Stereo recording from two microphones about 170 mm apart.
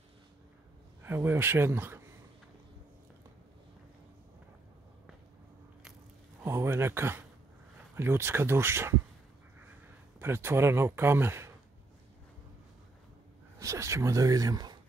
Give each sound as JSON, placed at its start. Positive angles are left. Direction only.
{"t": 1.0, "sound": "speech", "side_deg": -15}
{"t": 6.4, "sound": "speech", "side_deg": -15}
{"t": 10.1, "sound": "speech", "side_deg": -15}
{"t": 13.6, "sound": "speech", "side_deg": -20}